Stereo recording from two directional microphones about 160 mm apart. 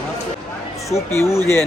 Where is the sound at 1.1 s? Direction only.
15° left (ahead or behind).